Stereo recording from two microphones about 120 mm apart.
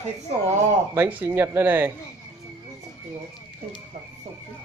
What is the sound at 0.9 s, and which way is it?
Speech, 15° right (ahead or behind).